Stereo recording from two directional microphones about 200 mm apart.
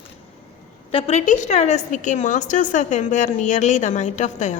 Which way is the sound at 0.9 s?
30° left (ahead or behind).